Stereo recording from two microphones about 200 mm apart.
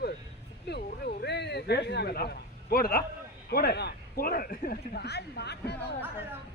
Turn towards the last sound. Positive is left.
turn(degrees=55)  # may be behind; listen again after turning